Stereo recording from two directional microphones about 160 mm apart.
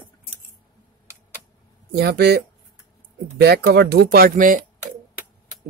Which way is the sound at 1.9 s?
90° right.